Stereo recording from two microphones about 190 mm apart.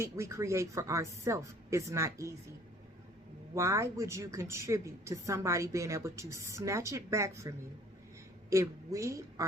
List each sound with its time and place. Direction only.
0.0 s a woman's voice: 15° right (ahead or behind)
3.5 s a woman's voice: 15° right (ahead or behind)